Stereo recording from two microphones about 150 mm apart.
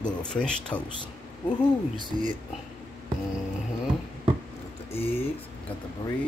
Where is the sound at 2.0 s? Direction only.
30° right (ahead or behind).